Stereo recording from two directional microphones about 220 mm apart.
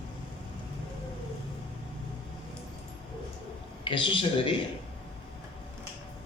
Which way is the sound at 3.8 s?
25° left (ahead or behind).